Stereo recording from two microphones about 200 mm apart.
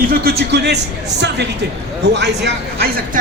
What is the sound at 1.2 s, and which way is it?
Speech, 60° right (ahead or behind).